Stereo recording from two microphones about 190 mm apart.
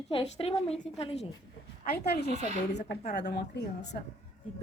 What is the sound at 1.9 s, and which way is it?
Speech, 55° left (ahead or behind).